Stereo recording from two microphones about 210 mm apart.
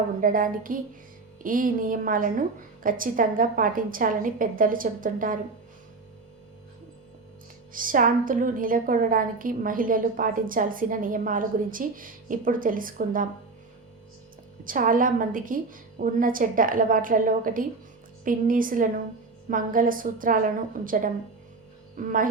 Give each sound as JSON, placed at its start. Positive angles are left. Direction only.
{"t": 0.2, "sound": "a woman's voice", "side_deg": -40}
{"t": 7.7, "sound": "a woman's voice", "side_deg": -40}
{"t": 14.6, "sound": "a woman's voice", "side_deg": -40}